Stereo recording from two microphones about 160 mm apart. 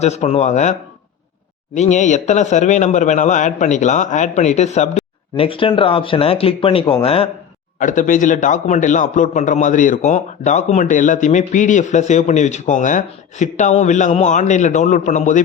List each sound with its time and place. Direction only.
0.0 s a man's voice: 45° left (ahead or behind)
7.8 s a man's voice: 55° left (ahead or behind)